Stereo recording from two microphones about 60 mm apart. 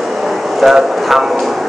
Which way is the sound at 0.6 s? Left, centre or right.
Centre.